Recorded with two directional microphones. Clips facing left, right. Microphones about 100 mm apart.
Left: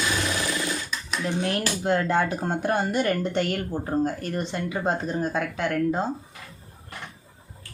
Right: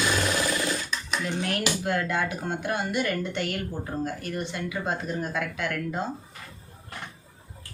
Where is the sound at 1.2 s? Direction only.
30° left (ahead or behind).